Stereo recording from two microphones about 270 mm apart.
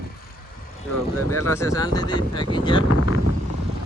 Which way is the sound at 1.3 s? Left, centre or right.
Centre.